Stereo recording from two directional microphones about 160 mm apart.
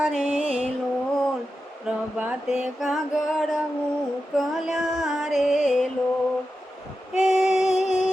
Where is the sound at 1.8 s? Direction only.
5° right (ahead or behind).